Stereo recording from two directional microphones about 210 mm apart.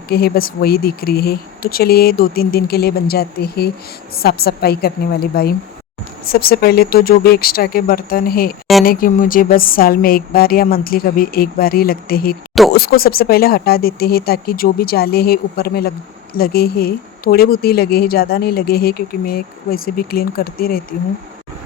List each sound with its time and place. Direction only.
0.1 s a woman's voice: 45° left (ahead or behind)